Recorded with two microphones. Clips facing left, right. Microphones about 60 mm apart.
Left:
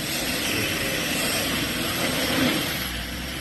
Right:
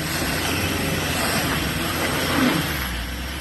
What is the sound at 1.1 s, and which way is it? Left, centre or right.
Vehicle, right.